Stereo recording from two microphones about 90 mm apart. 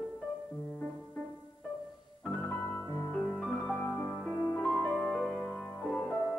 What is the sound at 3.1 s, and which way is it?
Music, 10° left (ahead or behind).